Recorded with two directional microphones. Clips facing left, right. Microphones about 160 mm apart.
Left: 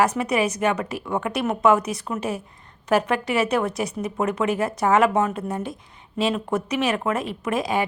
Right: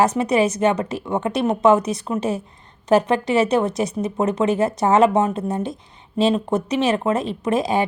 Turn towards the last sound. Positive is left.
turn(degrees=-25)  # may be behind; listen again after turning